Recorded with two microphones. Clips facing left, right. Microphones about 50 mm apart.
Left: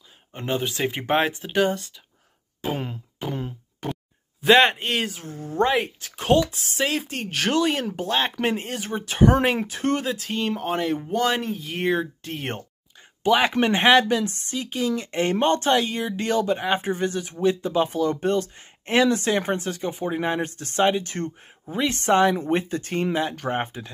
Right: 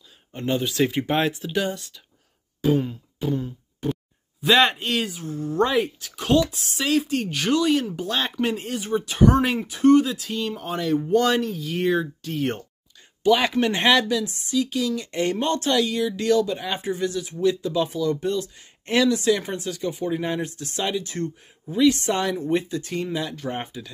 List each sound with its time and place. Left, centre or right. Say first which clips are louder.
0.3 s speech: right 1 dB; left
2.8 s a sound: right 3 dB; left
4.4 s speech: left 2 dB; left
5.4 s speech: right 1 dB; centre
5.7 s speech: even; left
14.0 s speech: left 1 dB; left
18.9 s speech: left 1 dB; left
19.1 s speech: right 1 dB; left